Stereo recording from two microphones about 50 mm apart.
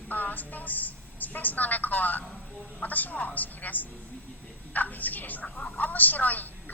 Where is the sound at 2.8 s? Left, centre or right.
Left.